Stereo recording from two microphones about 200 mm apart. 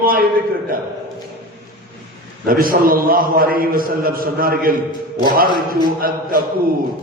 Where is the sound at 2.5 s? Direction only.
45° right (ahead or behind).